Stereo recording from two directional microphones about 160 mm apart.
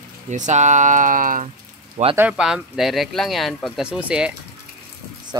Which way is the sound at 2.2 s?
5° right (ahead or behind).